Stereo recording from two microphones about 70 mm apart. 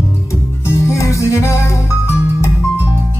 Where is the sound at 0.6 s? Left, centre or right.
Left.